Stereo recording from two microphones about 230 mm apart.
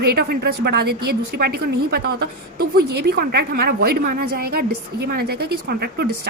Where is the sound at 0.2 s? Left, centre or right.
Right.